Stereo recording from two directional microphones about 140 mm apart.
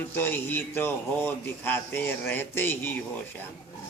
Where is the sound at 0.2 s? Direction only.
15° left (ahead or behind).